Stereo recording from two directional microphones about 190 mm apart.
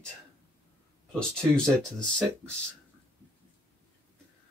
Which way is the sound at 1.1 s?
5° left (ahead or behind).